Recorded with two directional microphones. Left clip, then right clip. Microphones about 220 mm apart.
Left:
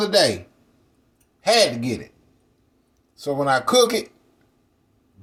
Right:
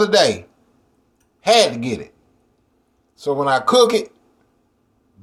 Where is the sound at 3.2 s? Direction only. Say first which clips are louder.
Right 3 dB; 15° right (ahead or behind).